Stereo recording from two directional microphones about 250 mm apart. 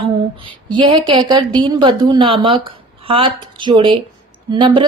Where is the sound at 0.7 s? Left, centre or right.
Centre.